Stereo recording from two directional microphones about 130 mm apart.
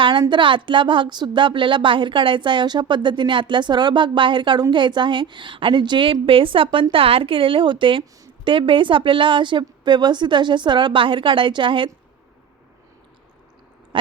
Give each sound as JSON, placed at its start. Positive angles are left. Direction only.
{"t": 0.0, "sound": "a woman's voice", "side_deg": -35}
{"t": 13.9, "sound": "owl", "side_deg": -40}